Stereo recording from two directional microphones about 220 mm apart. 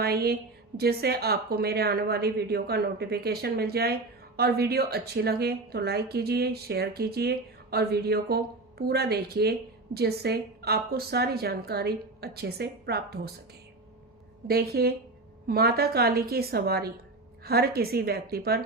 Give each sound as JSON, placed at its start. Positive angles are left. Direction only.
{"t": 0.0, "sound": "a woman's voice", "side_deg": -45}
{"t": 14.4, "sound": "a woman's voice", "side_deg": -45}